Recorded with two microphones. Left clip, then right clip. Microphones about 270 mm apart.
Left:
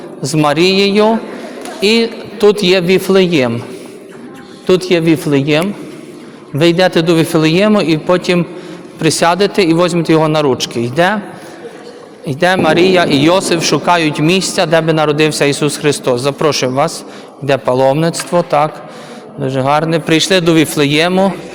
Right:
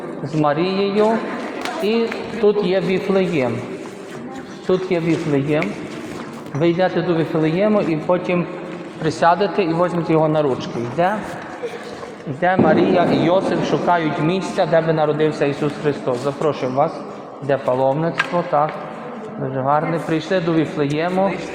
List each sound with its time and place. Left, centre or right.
0.2 s speech: left
4.7 s speech: left
12.4 s speech: left